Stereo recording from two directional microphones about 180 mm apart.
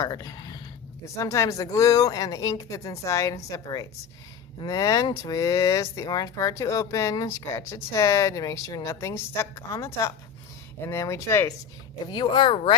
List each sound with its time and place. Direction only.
0.0 s speech: 20° left (ahead or behind)
12.0 s speech: 25° left (ahead or behind)